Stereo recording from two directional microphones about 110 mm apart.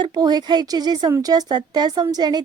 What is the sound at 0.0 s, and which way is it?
Speech, 40° right (ahead or behind).